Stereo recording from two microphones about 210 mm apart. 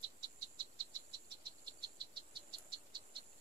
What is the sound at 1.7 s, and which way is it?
Insect, 20° right (ahead or behind).